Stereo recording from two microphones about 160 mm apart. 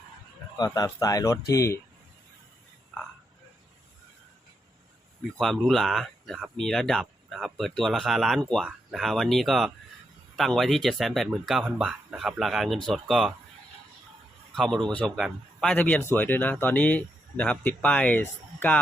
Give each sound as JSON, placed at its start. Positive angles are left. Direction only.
{"t": 0.5, "sound": "speech", "side_deg": 25}
{"t": 5.4, "sound": "speech", "side_deg": 0}
{"t": 14.5, "sound": "speech", "side_deg": 0}